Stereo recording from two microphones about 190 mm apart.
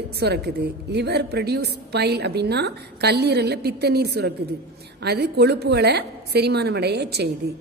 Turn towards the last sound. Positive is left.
turn(degrees=-60)  # may be behind; listen again after turning